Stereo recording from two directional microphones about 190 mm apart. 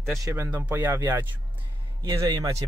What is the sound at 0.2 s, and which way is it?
Speech, 15° right (ahead or behind).